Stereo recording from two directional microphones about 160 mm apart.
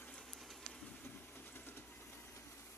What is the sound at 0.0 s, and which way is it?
Train, 5° left (ahead or behind).